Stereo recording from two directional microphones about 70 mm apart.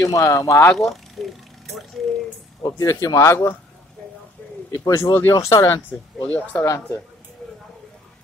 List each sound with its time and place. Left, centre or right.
0.0 s speech: left
0.7 s a sound: centre
2.6 s speech: left
3.2 s speech: left
4.7 s speech: left
5.9 s speech: left